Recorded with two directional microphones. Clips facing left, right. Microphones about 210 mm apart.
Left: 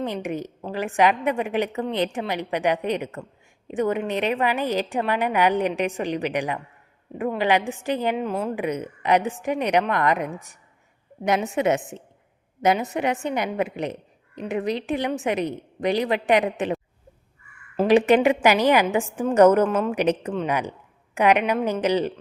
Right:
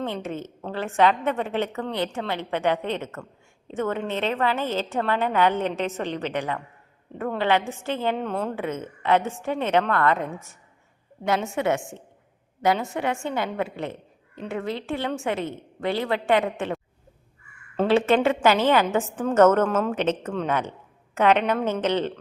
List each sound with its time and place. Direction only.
0.0 s a woman's voice: 15° left (ahead or behind)
17.7 s a woman's voice: 15° left (ahead or behind)